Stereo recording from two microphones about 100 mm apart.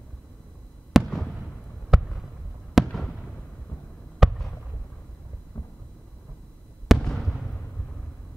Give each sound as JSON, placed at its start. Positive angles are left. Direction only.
{"t": 0.9, "sound": "fireworks", "side_deg": 0}
{"t": 1.9, "sound": "a sound", "side_deg": 0}
{"t": 2.7, "sound": "fireworks", "side_deg": 0}
{"t": 4.2, "sound": "fireworks", "side_deg": -5}
{"t": 6.9, "sound": "fireworks", "side_deg": 0}